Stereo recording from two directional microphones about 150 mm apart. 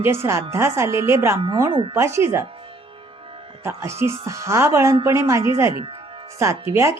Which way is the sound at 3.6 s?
20° right (ahead or behind).